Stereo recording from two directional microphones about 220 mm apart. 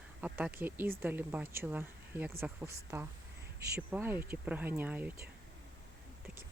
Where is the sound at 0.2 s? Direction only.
5° right (ahead or behind).